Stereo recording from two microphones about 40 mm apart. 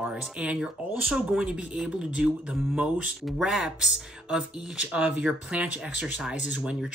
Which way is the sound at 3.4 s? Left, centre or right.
Centre.